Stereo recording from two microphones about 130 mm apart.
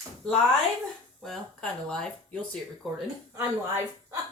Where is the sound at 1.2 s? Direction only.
5° left (ahead or behind).